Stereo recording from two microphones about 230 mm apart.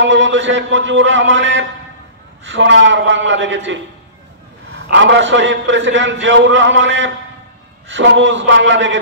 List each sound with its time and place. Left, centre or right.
0.0 s a man's voice: right
4.9 s a man's voice: right